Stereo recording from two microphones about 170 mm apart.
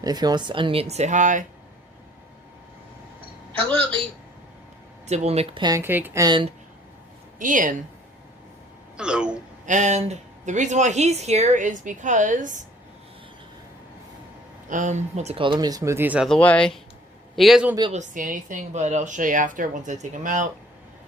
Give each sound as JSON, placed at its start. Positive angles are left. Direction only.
{"t": 0.0, "sound": "speech", "side_deg": -25}
{"t": 5.0, "sound": "speech", "side_deg": -40}
{"t": 5.6, "sound": "speech", "side_deg": -15}
{"t": 6.2, "sound": "speech", "side_deg": -30}
{"t": 7.3, "sound": "speech", "side_deg": -50}
{"t": 9.0, "sound": "speech", "side_deg": -5}
{"t": 9.6, "sound": "speech", "side_deg": -45}
{"t": 14.7, "sound": "speech", "side_deg": -45}
{"t": 16.3, "sound": "speech", "side_deg": 10}
{"t": 17.9, "sound": "speech", "side_deg": -50}